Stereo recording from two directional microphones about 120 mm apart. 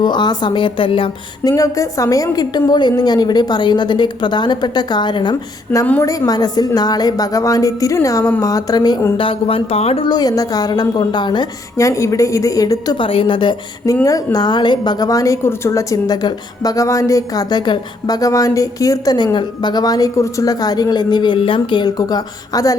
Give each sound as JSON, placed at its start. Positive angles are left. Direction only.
{"t": 0.0, "sound": "a woman's voice", "side_deg": 35}
{"t": 1.5, "sound": "a woman's voice", "side_deg": 30}
{"t": 9.1, "sound": "speech", "side_deg": 50}
{"t": 10.1, "sound": "a woman's voice", "side_deg": 35}
{"t": 11.8, "sound": "a woman's voice", "side_deg": 25}
{"t": 13.0, "sound": "speech", "side_deg": 45}
{"t": 13.8, "sound": "a woman's voice", "side_deg": 30}